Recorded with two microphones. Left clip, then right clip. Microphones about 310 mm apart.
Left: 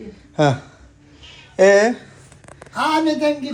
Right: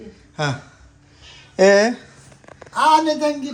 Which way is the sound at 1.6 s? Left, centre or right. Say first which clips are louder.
Left 1 dB; centre.